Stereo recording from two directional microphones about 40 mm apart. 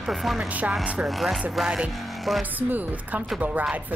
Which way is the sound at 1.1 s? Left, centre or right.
Centre.